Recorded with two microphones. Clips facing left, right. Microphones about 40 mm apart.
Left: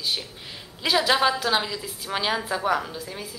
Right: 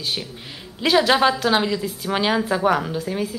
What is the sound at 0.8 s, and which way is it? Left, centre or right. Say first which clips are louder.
A woman's voice: right 5 dB; centre.